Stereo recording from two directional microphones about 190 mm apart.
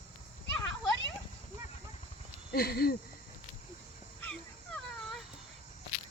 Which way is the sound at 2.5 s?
55° left (ahead or behind).